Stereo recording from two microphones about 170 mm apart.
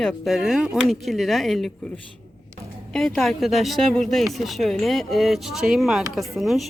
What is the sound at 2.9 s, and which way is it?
Speech, 5° left (ahead or behind).